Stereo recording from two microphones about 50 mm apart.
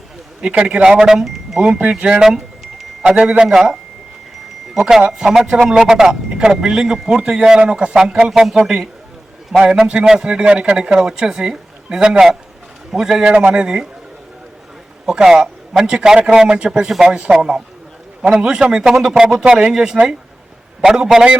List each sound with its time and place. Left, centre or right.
0.4 s speech: centre
1.6 s speech: right
4.7 s speech: centre
8.3 s speech: centre
15.0 s speech: centre